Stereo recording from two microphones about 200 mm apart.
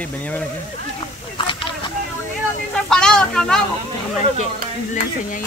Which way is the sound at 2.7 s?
5° left (ahead or behind).